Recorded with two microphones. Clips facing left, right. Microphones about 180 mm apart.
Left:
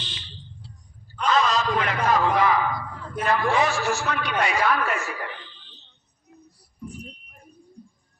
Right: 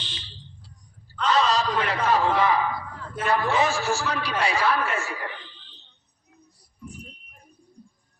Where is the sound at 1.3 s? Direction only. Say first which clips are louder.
Even; 35° right (ahead or behind).